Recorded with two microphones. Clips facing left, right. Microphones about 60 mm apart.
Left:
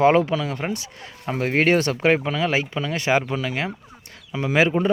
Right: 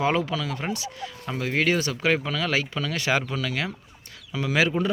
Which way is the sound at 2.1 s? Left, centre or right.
Left.